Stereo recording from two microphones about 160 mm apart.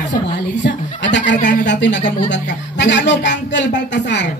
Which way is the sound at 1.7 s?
90° left.